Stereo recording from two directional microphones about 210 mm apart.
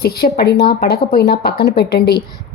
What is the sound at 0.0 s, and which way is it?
A woman's voice, 50° left (ahead or behind).